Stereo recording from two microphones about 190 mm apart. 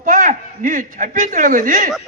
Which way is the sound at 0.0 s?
45° right (ahead or behind).